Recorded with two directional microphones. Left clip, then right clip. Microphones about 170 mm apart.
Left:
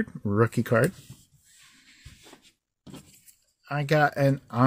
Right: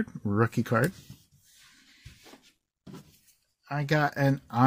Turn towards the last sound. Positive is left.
turn(degrees=15)  # may be behind; listen again after turning